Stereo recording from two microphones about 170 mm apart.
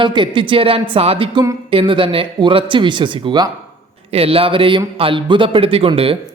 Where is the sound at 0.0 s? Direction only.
30° right (ahead or behind).